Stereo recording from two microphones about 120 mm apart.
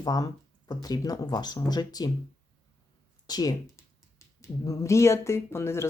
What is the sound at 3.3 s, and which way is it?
Speech, 35° left (ahead or behind).